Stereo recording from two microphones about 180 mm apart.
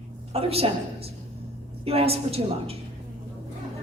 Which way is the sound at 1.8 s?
35° right (ahead or behind).